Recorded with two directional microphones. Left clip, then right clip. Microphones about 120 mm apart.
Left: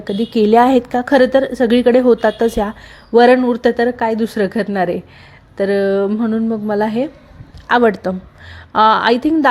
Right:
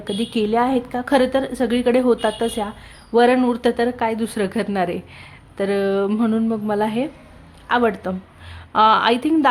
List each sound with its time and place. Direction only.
0.0 s a woman's voice: 25° left (ahead or behind)
0.3 s a woman's voice: 40° left (ahead or behind)
1.1 s a woman's voice: 30° left (ahead or behind)
6.1 s a sound: 5° left (ahead or behind)
6.3 s a woman's voice: 20° left (ahead or behind)